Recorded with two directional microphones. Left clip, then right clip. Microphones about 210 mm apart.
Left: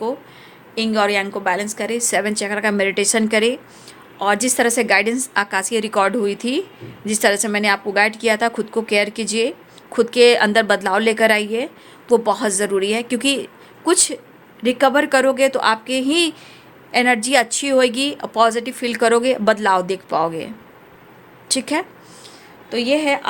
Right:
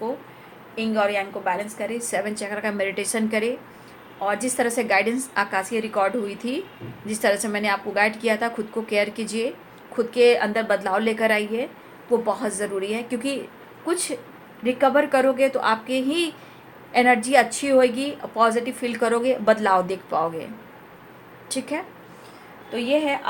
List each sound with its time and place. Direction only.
0.8 s a woman's voice: 55° left (ahead or behind)
21.5 s a woman's voice: 45° left (ahead or behind)
22.7 s a woman's voice: 60° left (ahead or behind)